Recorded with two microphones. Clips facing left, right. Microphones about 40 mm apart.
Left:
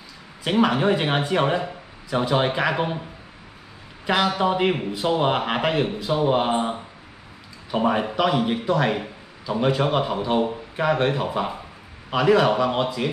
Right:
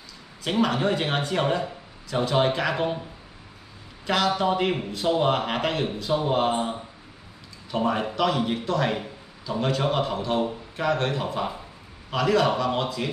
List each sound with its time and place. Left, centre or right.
0.4 s speech: centre
4.0 s speech: centre